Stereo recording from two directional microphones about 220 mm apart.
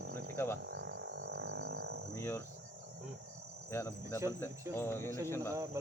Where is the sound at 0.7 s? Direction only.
50° right (ahead or behind).